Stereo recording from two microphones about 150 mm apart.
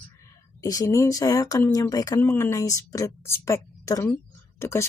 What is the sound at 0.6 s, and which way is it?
A woman's voice, 20° left (ahead or behind).